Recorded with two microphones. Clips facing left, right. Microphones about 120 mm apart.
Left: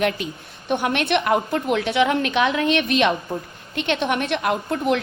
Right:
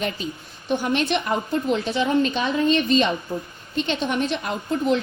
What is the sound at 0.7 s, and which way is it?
A woman's voice, 60° left (ahead or behind).